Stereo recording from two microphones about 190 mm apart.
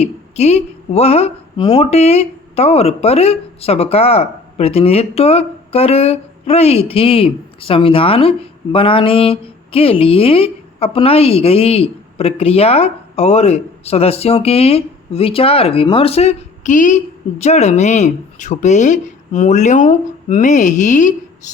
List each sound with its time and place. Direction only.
0.0 s a woman's voice: 35° left (ahead or behind)